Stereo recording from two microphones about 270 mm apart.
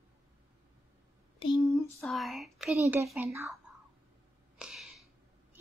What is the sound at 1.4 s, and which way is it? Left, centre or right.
Speech, centre.